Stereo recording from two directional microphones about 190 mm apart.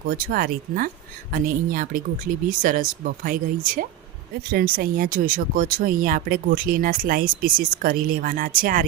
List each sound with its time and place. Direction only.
0.1 s speech: 50° right (ahead or behind)